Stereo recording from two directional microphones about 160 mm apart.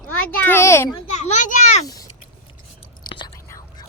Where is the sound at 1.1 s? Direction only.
45° left (ahead or behind).